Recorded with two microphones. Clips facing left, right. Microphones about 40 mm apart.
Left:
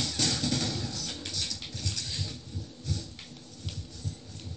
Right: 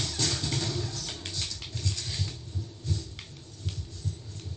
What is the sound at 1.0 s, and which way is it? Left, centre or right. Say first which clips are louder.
Music: even; right.